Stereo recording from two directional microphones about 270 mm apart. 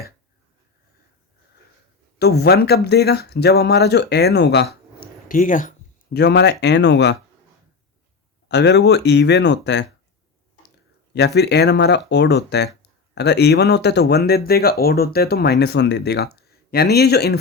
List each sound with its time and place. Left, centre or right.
2.1 s speech: left
8.4 s speech: left
11.3 s speech: left